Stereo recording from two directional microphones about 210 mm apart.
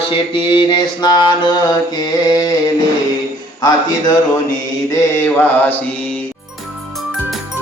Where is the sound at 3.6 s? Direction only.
20° left (ahead or behind).